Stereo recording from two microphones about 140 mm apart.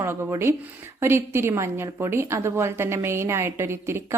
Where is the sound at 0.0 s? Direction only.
20° right (ahead or behind).